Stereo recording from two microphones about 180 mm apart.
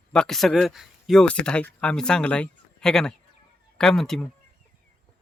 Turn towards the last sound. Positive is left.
turn(degrees=0)  # may be behind; listen again after turning